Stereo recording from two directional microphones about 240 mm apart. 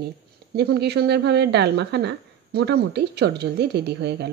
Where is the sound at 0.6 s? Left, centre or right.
Right.